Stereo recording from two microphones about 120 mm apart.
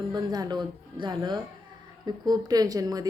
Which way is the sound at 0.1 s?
35° right (ahead or behind).